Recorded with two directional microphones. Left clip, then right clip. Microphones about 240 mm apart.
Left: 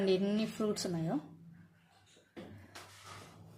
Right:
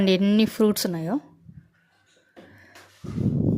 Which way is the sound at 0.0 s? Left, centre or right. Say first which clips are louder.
Right 11 dB; right.